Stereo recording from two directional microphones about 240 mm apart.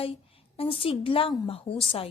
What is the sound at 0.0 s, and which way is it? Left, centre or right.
A woman's voice, left.